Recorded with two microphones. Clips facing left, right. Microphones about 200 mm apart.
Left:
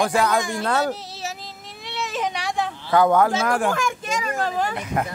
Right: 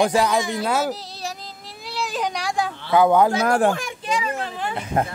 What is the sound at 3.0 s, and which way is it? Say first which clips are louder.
Speech: right 1 dB; 15° right (ahead or behind).